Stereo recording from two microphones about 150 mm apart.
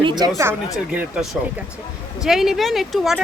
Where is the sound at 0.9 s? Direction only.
5° right (ahead or behind).